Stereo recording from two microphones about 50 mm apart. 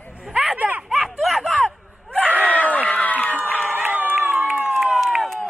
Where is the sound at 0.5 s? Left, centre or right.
Right.